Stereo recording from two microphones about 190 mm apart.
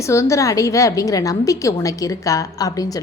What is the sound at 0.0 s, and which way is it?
A woman's voice, 15° left (ahead or behind).